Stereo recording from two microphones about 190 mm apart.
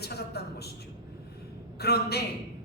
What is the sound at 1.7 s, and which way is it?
Speech, 60° left (ahead or behind).